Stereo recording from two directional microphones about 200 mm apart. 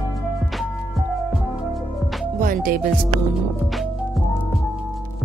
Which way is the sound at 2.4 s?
45° right (ahead or behind).